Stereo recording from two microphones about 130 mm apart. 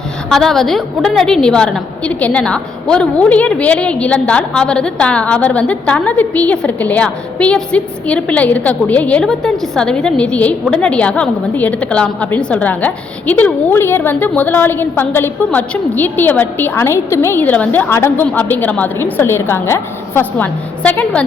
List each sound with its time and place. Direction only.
0.3 s a woman's voice: centre (ahead or behind)